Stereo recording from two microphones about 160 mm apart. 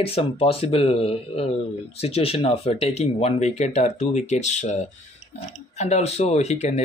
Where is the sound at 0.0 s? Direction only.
35° left (ahead or behind).